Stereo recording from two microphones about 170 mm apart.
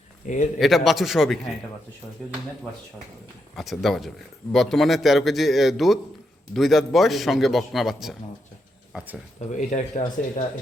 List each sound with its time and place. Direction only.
0.2 s speech: 50° left (ahead or behind)
0.6 s a man's voice: centre (ahead or behind)
3.5 s a man's voice: centre (ahead or behind)
9.5 s speech: 45° left (ahead or behind)